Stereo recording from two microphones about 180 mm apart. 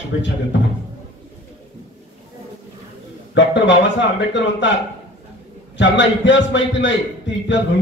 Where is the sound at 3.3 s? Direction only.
85° left.